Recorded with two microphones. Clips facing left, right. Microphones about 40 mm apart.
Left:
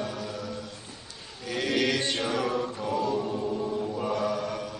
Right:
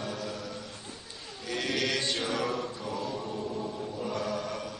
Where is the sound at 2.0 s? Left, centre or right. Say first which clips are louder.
Left 2 dB; left.